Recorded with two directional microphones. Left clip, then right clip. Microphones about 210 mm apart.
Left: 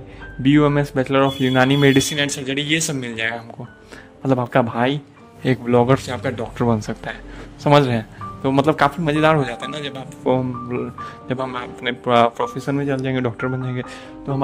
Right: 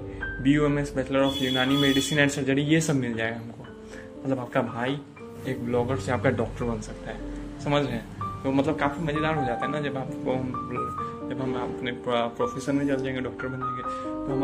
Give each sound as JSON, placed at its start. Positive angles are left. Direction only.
{"t": 0.4, "sound": "a man's voice", "side_deg": 40}
{"t": 6.0, "sound": "speech", "side_deg": 0}
{"t": 6.3, "sound": "a man's voice", "side_deg": 45}
{"t": 10.2, "sound": "a man's voice", "side_deg": 40}